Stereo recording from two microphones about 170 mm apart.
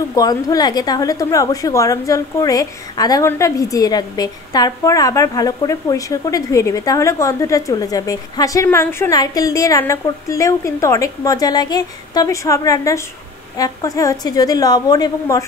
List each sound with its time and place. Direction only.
0.1 s a woman's voice: 20° left (ahead or behind)